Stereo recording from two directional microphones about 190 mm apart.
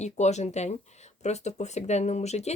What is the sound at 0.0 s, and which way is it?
Speech, 35° left (ahead or behind).